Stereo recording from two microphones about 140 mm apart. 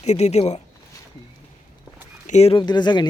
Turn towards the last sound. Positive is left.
turn(degrees=30)  # may be behind; listen again after turning